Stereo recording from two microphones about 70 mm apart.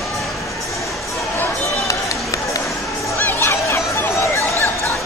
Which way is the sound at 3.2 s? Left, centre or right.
Left.